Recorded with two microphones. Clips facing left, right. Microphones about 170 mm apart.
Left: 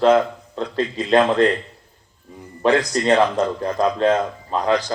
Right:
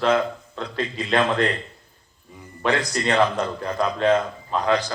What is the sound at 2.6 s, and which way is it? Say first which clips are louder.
A man's voice: left 6 dB; 35° left (ahead or behind).